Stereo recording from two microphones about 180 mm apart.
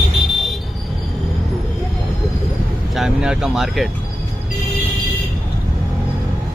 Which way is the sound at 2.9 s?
5° right (ahead or behind).